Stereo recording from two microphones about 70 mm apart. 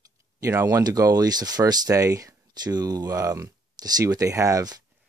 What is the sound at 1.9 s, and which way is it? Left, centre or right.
Speech, right.